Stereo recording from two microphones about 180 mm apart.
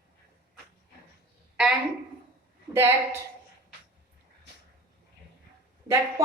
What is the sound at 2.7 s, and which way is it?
Speech, 15° right (ahead or behind).